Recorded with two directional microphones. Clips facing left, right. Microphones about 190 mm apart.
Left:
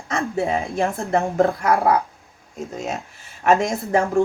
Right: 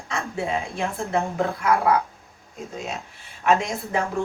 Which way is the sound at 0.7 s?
45° left (ahead or behind).